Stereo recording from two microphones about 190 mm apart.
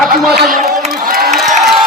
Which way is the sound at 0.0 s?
Centre (ahead or behind).